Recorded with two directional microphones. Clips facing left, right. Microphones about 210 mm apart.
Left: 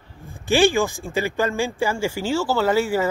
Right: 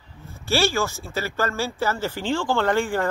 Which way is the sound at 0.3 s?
15° left (ahead or behind).